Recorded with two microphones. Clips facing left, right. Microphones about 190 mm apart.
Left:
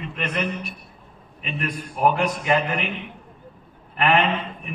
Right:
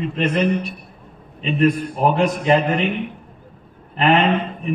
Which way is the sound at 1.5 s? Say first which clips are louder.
Right 12 dB; 30° right (ahead or behind).